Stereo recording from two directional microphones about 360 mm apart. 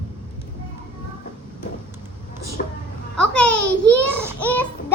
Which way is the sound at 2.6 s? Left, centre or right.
Left.